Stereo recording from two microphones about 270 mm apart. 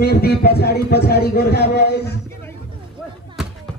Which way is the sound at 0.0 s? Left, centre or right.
Left.